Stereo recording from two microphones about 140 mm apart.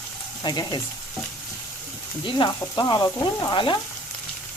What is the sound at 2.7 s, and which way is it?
Speech, 30° left (ahead or behind).